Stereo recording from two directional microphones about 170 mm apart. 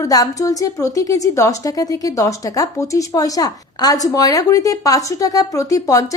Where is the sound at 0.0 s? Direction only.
20° left (ahead or behind).